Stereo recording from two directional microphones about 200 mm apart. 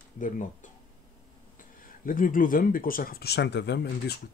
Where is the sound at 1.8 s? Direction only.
45° left (ahead or behind).